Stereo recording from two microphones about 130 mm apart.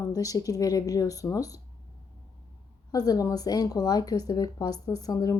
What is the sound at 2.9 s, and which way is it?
Speech, 30° left (ahead or behind).